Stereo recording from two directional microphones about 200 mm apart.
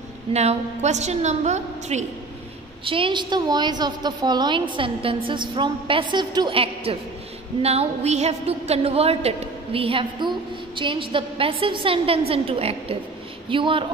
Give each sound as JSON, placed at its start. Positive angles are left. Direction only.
{"t": 0.3, "sound": "a woman's voice", "side_deg": -35}